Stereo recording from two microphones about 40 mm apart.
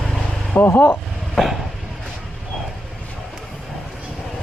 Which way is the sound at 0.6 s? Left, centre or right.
Left.